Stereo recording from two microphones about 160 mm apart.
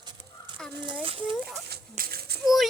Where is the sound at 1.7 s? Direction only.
70° right (ahead or behind).